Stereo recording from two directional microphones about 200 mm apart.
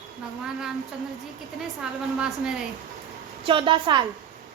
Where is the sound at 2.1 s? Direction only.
5° right (ahead or behind).